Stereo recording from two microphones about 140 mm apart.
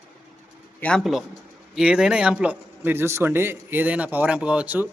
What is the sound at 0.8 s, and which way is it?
A man's voice, 5° left (ahead or behind).